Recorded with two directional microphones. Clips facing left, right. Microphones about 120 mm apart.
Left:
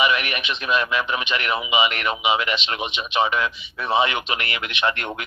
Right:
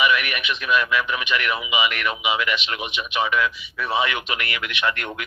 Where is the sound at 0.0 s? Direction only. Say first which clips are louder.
Even; 25° left (ahead or behind).